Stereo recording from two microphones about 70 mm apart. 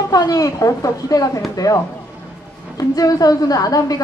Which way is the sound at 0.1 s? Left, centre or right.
Left.